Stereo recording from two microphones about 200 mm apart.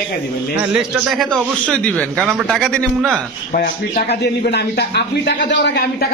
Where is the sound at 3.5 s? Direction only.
45° left (ahead or behind).